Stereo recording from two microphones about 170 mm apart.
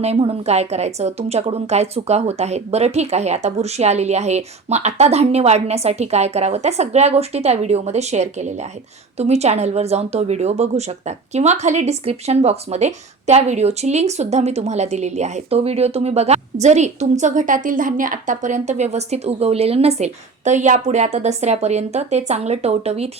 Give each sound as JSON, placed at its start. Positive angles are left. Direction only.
{"t": 0.0, "sound": "a woman's voice", "side_deg": -35}